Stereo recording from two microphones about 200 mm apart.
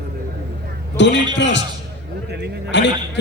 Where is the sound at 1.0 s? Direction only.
60° left (ahead or behind).